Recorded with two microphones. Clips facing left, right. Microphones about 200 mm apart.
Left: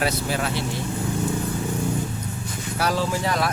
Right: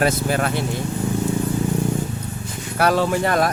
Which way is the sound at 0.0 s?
50° right (ahead or behind).